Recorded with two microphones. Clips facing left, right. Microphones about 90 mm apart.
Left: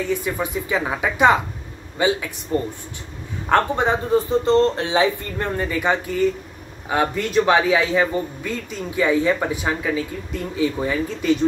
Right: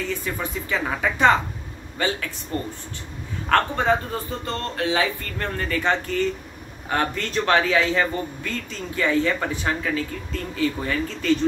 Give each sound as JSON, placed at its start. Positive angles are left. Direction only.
{"t": 0.2, "sound": "speech", "side_deg": 15}